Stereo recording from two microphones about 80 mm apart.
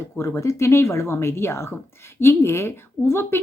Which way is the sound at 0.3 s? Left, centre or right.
Left.